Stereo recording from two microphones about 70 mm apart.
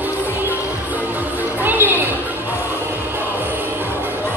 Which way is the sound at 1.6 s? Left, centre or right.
Right.